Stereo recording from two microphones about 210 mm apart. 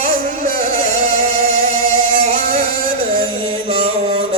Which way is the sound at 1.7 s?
70° left (ahead or behind).